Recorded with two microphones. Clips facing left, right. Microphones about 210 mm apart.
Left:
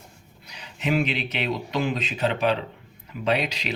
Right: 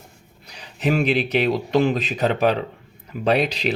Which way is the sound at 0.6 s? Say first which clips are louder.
Right 4 dB; 35° right (ahead or behind).